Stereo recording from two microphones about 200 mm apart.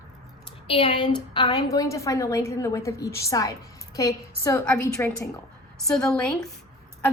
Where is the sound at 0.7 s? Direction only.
30° left (ahead or behind).